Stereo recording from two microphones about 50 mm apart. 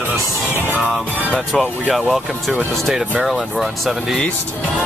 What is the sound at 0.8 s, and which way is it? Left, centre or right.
Music, right.